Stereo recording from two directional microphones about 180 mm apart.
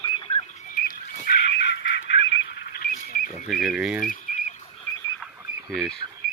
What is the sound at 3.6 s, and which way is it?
Speech, 5° right (ahead or behind).